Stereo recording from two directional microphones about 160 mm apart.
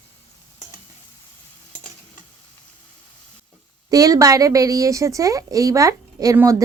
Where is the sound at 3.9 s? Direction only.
20° right (ahead or behind).